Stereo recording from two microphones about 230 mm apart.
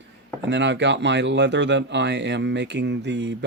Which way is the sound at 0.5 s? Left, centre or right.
Right.